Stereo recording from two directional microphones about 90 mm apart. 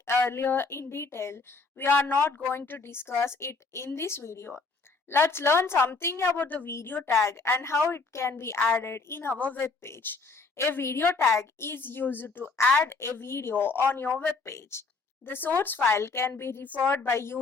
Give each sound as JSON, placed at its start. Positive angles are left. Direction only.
{"t": 0.0, "sound": "a woman's voice", "side_deg": 25}
{"t": 14.4, "sound": "a woman's voice", "side_deg": 30}